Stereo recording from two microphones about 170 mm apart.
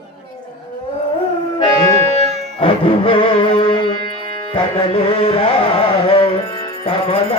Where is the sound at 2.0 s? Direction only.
40° right (ahead or behind).